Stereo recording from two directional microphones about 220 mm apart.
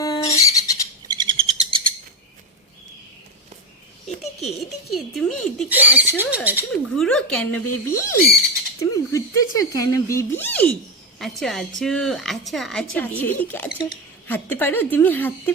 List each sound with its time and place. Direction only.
0.0 s bird: 15° left (ahead or behind)
1.0 s bird: 20° right (ahead or behind)
4.9 s a woman's voice: centre (ahead or behind)
5.7 s speech: 5° right (ahead or behind)
7.0 s a woman's voice: 5° left (ahead or behind)